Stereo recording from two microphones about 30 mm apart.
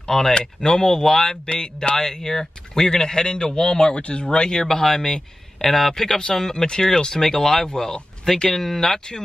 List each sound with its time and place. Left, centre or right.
0.0 s speech: centre
0.3 s a man's voice: left
4.6 s speech: centre
6.5 s a man's voice: left; by 9.0 s centre